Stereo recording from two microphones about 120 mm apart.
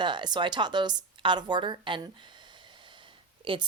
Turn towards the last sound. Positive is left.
turn(degrees=-45)  # may be behind; listen again after turning